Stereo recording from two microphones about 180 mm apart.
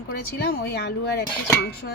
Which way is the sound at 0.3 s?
65° left (ahead or behind).